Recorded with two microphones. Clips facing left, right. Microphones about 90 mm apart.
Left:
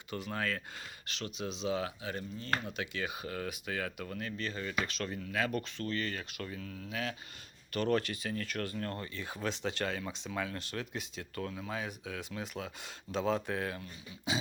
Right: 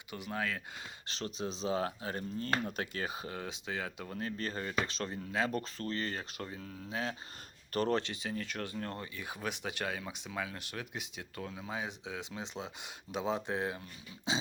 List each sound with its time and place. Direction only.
0.1 s speech: 15° right (ahead or behind)
1.0 s speech: 30° right (ahead or behind)
14.3 s dog: 25° right (ahead or behind)